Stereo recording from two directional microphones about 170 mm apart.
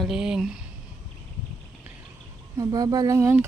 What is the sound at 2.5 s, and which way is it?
Speech, 20° right (ahead or behind).